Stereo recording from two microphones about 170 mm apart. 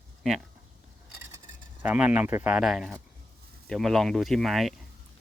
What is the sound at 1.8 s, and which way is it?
Speech, 5° right (ahead or behind).